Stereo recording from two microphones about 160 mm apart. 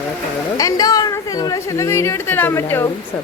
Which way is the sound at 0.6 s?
25° left (ahead or behind).